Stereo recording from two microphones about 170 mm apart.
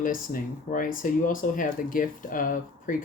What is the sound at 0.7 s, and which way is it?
Speech, 55° left (ahead or behind).